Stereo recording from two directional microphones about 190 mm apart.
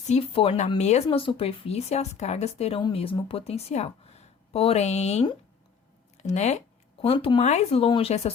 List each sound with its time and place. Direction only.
0.1 s speech: 30° left (ahead or behind)